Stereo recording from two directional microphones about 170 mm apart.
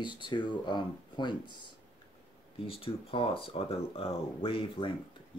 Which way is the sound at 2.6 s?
35° left (ahead or behind).